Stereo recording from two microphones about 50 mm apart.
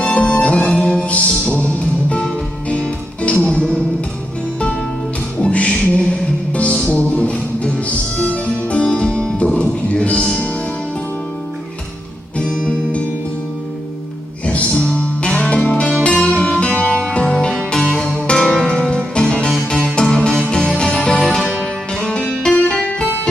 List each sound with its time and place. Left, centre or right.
0.0 s music: centre
1.0 s music: left
2.6 s music: left
5.4 s music: left
12.4 s music: left
14.4 s music: left
17.8 s music: left; by 21.4 s centre
21.4 s music: centre
22.7 s music: centre